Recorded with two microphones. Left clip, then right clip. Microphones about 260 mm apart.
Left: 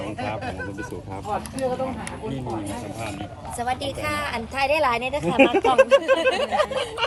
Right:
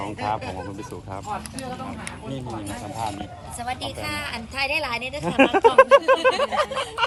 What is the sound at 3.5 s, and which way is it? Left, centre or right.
Speech, centre.